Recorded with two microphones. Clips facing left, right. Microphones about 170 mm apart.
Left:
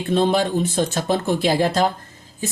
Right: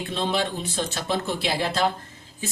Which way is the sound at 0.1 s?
45° left (ahead or behind).